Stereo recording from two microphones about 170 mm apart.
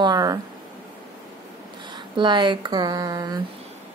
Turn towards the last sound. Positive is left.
turn(degrees=-20)  # may be behind; listen again after turning